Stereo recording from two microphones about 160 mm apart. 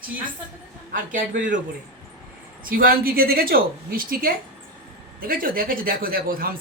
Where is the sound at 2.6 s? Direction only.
65° right (ahead or behind).